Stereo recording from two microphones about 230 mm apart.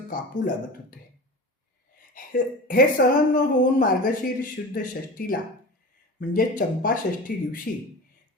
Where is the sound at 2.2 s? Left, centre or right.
Left.